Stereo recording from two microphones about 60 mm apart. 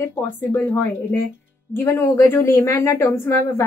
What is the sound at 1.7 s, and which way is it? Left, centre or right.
A woman's voice, left.